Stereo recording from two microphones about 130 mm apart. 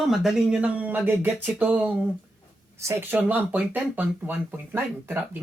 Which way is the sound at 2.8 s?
20° right (ahead or behind).